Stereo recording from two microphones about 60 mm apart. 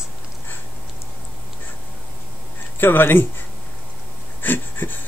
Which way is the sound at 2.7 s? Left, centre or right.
Left.